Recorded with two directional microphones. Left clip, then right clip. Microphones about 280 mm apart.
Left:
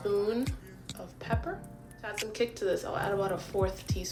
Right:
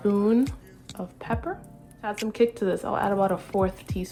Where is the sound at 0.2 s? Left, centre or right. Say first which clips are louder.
Right 7 dB; centre.